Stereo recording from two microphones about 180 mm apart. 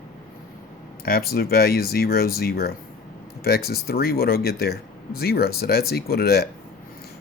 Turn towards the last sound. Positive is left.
turn(degrees=60)  # may be behind; listen again after turning